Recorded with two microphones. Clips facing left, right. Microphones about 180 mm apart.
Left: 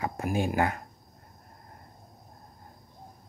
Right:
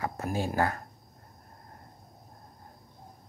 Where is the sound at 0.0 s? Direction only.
15° left (ahead or behind).